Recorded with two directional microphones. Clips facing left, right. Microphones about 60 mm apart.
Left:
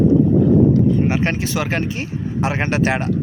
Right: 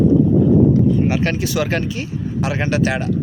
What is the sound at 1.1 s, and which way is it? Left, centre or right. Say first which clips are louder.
Speech: even; left.